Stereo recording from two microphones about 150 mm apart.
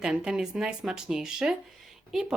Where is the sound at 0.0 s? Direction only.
5° right (ahead or behind).